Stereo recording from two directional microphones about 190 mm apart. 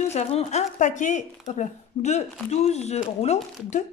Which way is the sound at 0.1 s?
35° left (ahead or behind).